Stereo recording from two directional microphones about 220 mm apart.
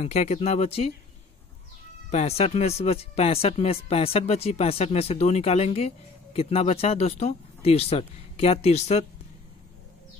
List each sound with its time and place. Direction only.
0.0 s speech: 30° left (ahead or behind)
2.0 s speech: 30° left (ahead or behind)